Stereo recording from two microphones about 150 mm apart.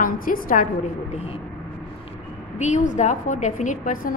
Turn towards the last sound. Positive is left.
turn(degrees=65)  # may be behind; listen again after turning